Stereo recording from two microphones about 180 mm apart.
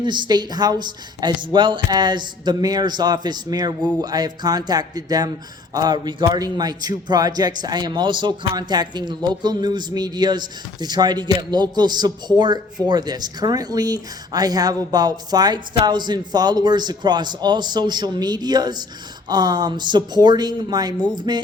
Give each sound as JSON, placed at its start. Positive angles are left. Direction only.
{"t": 0.0, "sound": "speech", "side_deg": -25}